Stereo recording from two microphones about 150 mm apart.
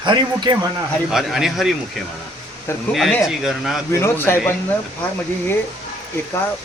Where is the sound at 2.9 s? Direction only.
Centre (ahead or behind).